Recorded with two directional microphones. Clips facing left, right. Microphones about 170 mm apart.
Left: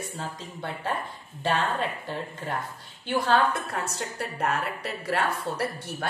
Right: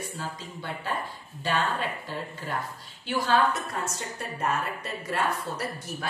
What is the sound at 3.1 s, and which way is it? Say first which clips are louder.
A woman's voice: left 1 dB; 55° left (ahead or behind).